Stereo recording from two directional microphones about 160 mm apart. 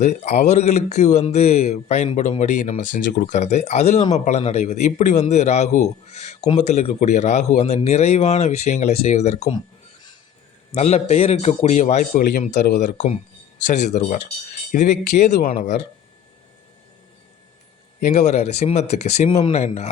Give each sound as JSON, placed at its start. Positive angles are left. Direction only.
{"t": 0.0, "sound": "speech", "side_deg": 45}
{"t": 10.7, "sound": "speech", "side_deg": 45}
{"t": 12.1, "sound": "speech", "side_deg": 65}
{"t": 12.8, "sound": "speech", "side_deg": 55}
{"t": 18.0, "sound": "speech", "side_deg": 45}